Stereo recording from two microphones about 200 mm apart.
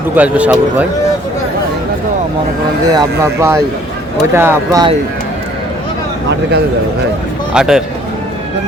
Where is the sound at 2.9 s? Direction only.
15° right (ahead or behind).